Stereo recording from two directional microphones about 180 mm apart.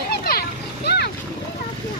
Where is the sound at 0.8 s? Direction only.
65° left (ahead or behind).